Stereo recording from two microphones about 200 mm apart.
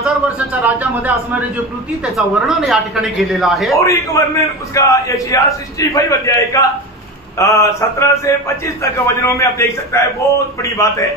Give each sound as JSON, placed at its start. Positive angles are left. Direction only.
{"t": 0.0, "sound": "speech", "side_deg": -10}
{"t": 2.1, "sound": "speech", "side_deg": 0}
{"t": 3.7, "sound": "a man's voice", "side_deg": 15}